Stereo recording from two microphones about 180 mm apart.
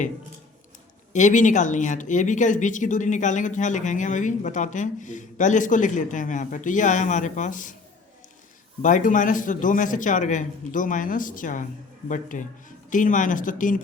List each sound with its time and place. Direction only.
1.1 s speech: 45° left (ahead or behind)
8.8 s speech: 45° left (ahead or behind)